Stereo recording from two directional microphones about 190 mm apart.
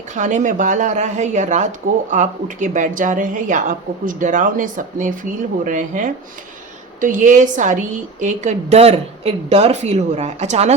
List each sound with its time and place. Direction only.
0.1 s a woman's voice: 40° right (ahead or behind)